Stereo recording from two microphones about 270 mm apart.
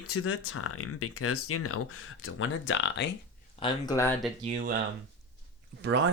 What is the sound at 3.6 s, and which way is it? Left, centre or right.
Speech, centre.